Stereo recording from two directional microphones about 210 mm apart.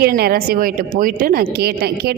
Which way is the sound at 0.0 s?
45° right (ahead or behind).